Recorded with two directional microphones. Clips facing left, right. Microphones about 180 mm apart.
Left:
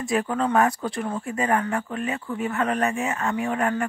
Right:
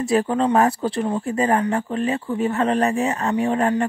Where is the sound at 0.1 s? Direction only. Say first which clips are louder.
Right 4 dB; 30° right (ahead or behind).